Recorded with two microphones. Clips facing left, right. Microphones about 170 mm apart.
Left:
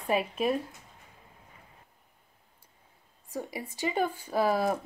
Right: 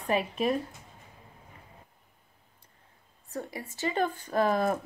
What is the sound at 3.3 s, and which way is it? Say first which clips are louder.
Speech: left 1 dB; 15° left (ahead or behind).